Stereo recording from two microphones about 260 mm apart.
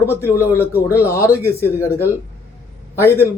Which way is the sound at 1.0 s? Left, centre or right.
Centre.